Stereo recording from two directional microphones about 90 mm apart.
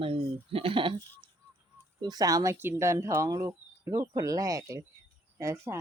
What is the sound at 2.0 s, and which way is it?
Speech, 45° right (ahead or behind).